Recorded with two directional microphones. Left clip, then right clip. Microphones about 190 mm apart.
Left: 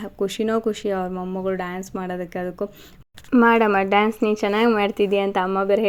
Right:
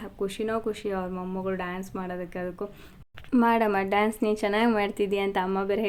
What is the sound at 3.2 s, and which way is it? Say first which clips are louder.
Speech: left 7 dB; 5° left (ahead or behind).